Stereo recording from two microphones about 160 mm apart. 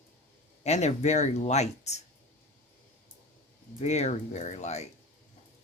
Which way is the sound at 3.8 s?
45° left (ahead or behind).